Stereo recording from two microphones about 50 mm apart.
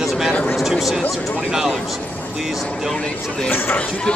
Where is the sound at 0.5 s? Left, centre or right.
Centre.